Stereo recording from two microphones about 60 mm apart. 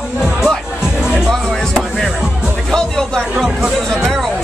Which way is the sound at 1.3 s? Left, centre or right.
Centre.